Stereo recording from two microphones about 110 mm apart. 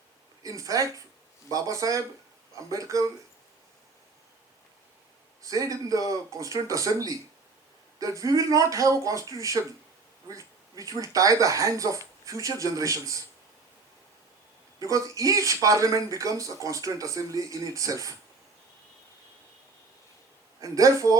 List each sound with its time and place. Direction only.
0.4 s speech: 30° right (ahead or behind)
5.4 s speech: 30° right (ahead or behind)
14.8 s speech: 30° right (ahead or behind)
20.6 s speech: 30° right (ahead or behind)